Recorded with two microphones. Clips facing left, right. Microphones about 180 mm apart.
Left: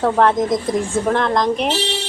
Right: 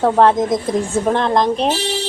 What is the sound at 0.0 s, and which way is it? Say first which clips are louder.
Speech: right 2 dB; 20° right (ahead or behind).